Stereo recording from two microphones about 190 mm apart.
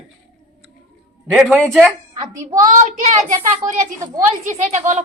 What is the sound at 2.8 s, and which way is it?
Speech, 40° right (ahead or behind).